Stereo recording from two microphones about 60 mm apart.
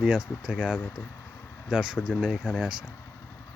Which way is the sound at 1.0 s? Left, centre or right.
Left.